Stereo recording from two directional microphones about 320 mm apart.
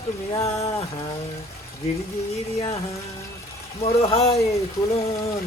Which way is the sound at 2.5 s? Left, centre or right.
Centre.